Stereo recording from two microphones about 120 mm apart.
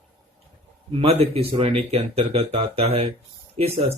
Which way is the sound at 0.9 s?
55° right (ahead or behind).